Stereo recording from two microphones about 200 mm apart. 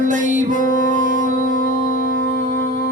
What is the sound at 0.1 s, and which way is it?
Music, 40° right (ahead or behind).